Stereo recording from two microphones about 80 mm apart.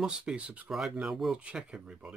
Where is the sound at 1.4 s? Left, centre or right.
Centre.